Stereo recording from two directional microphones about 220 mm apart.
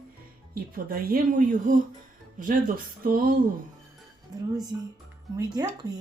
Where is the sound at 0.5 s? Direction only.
40° right (ahead or behind).